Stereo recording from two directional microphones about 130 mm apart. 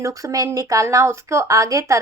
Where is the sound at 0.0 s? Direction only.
25° right (ahead or behind).